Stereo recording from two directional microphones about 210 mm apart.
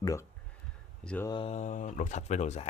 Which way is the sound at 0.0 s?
15° left (ahead or behind).